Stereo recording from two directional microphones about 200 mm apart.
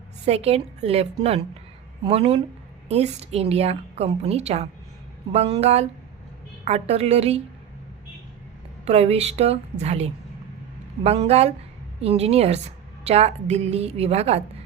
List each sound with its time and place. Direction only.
0.3 s a woman's voice: 30° right (ahead or behind)
2.0 s a woman's voice: 30° right (ahead or behind)
8.8 s a woman's voice: 30° right (ahead or behind)